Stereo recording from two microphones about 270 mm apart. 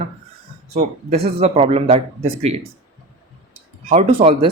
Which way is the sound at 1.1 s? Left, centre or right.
Right.